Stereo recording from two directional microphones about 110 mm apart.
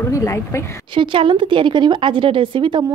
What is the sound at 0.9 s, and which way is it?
A woman's voice, 50° right (ahead or behind).